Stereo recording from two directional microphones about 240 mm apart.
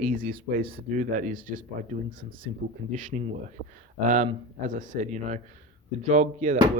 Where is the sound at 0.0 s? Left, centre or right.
Right.